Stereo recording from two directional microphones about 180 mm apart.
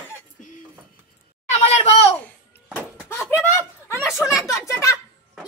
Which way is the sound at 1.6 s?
35° left (ahead or behind).